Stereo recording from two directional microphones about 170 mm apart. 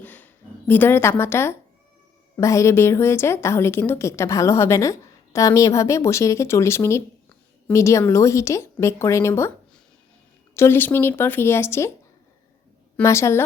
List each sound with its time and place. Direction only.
0.0 s a sound: 10° left (ahead or behind)
0.7 s a woman's voice: 10° left (ahead or behind)
10.5 s a woman's voice: 15° left (ahead or behind)
13.0 s a woman's voice: 15° left (ahead or behind)